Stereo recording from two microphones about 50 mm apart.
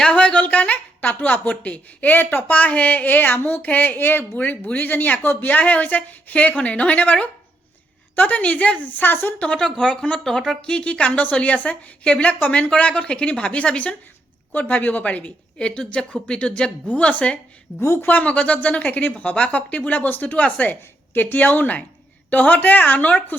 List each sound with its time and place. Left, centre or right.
0.0 s speech: left
4.4 s a woman's voice: left
8.9 s speech: left
9.4 s a woman's voice: left
17.7 s speech: left
18.0 s a woman's voice: left
20.0 s speech: left